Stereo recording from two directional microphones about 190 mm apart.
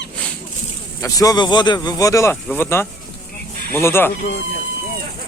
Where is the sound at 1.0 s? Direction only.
20° left (ahead or behind).